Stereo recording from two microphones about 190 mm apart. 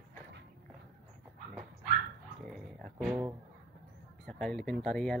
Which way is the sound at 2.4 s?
Centre (ahead or behind).